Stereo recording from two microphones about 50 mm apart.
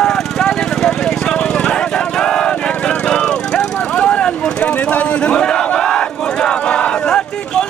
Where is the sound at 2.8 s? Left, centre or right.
Left.